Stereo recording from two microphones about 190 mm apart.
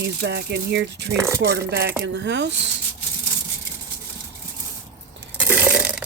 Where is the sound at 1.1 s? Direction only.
15° right (ahead or behind).